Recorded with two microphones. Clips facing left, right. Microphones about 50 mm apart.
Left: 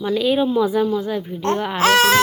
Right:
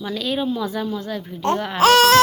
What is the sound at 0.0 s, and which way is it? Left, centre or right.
A woman's voice, centre.